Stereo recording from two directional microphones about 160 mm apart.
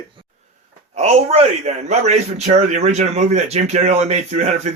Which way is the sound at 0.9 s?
40° right (ahead or behind).